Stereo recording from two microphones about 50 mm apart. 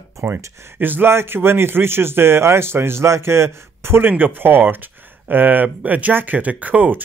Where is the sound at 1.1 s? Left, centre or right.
Right.